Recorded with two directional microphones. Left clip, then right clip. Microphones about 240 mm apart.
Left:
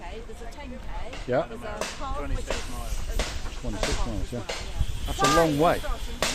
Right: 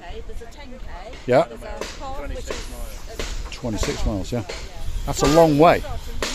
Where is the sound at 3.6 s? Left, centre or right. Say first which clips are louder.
Right 4 dB; right.